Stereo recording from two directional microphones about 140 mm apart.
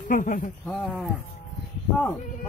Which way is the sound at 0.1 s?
70° left (ahead or behind).